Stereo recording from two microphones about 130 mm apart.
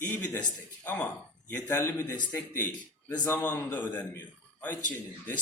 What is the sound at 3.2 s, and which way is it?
Speech, 15° left (ahead or behind).